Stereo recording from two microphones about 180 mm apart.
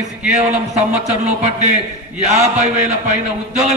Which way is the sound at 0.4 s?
40° right (ahead or behind).